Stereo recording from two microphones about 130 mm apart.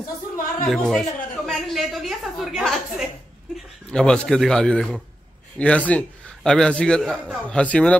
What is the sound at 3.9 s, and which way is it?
A man's voice, 5° left (ahead or behind).